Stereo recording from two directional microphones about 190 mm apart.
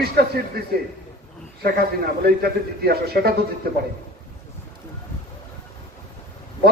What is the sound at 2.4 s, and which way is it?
Speech, 55° right (ahead or behind).